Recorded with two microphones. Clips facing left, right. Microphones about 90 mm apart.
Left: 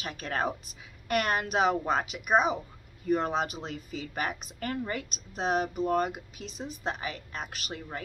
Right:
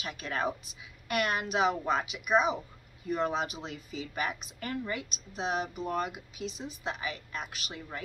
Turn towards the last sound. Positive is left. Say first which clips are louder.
# left 3 dB
turn(degrees=45)  # may be behind; listen again after turning